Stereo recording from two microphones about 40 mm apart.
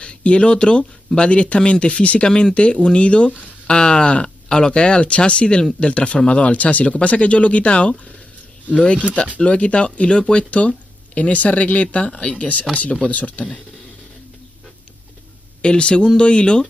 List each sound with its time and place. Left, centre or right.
0.0 s speech: left
11.1 s speech: left
15.6 s speech: left